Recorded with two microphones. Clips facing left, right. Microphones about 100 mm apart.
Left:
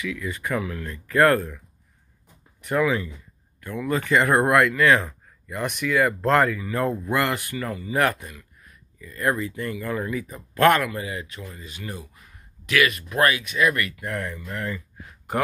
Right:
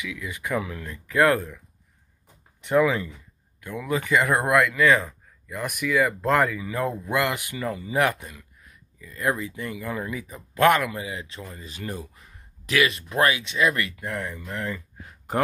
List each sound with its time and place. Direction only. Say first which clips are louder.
0.0 s speech: left 4 dB; 15° right (ahead or behind)
2.6 s speech: right 2 dB; 20° right (ahead or behind)
11.2 s speech: even; 30° right (ahead or behind)